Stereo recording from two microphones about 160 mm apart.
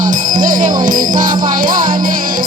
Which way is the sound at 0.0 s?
55° right (ahead or behind).